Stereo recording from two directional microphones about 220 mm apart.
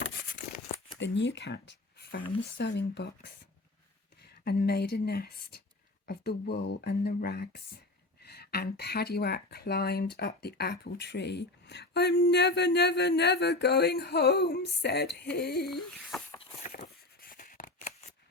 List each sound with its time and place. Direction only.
0.9 s speech: 55° left (ahead or behind)
4.4 s speech: 45° left (ahead or behind)
16.6 s scissors: 40° left (ahead or behind)